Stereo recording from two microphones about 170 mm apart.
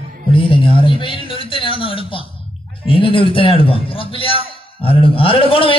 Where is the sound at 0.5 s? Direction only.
30° left (ahead or behind).